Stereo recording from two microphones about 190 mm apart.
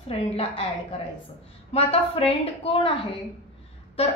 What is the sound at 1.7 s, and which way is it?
A woman's voice, 30° left (ahead or behind).